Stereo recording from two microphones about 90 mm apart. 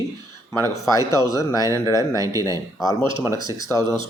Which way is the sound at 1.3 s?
45° left (ahead or behind).